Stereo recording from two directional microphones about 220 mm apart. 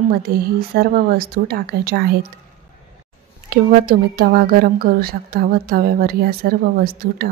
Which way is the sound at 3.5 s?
45° right (ahead or behind).